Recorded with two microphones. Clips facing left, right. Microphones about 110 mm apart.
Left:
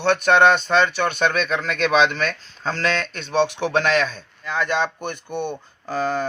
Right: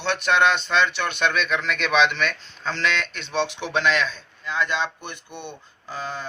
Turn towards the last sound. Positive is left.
turn(degrees=55)  # may be behind; listen again after turning